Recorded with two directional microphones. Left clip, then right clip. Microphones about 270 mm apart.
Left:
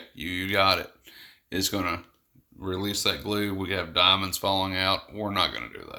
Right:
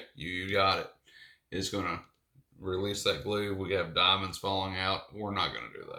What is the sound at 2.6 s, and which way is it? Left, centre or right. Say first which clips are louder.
Speech: left 3 dB; left.